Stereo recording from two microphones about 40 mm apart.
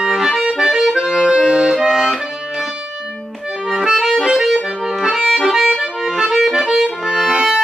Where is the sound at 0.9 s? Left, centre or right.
Centre.